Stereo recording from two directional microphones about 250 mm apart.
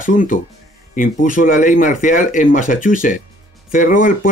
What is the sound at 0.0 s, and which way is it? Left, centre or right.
Speech, left.